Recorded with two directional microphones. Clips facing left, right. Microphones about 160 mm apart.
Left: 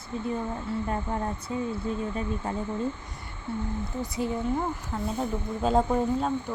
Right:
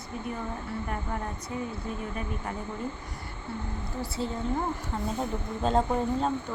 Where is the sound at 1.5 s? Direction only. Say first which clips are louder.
Left 3 dB; 25° left (ahead or behind).